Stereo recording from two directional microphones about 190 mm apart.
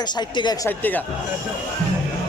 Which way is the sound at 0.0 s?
20° left (ahead or behind).